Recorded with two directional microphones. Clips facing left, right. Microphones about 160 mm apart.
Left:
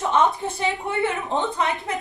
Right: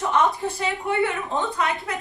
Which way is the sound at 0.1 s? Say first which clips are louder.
Left 1 dB; 20° left (ahead or behind).